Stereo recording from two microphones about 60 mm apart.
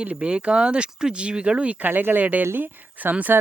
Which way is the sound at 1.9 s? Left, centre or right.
Right.